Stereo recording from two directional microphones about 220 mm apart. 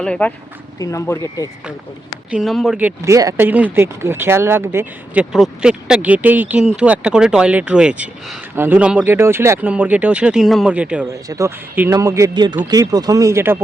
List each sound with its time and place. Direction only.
0.0 s speech: 5° left (ahead or behind)
2.3 s speech: centre (ahead or behind)